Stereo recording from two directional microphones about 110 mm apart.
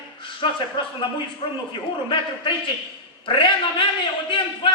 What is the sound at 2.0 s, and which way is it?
A man's voice, 45° left (ahead or behind).